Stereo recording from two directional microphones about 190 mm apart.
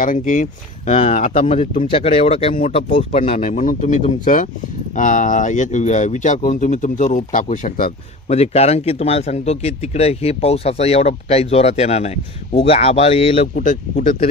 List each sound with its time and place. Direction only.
0.0 s a man's voice: 45° left (ahead or behind)
8.3 s a man's voice: 35° left (ahead or behind)